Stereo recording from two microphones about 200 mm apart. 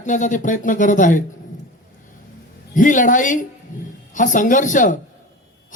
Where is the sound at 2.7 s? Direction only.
40° left (ahead or behind).